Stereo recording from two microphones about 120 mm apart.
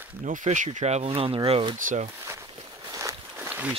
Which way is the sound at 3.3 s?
15° right (ahead or behind).